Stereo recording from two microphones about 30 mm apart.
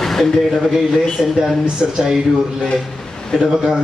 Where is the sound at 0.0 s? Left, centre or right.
Centre.